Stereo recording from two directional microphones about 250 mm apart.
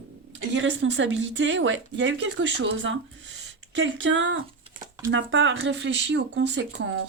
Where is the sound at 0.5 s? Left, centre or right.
Right.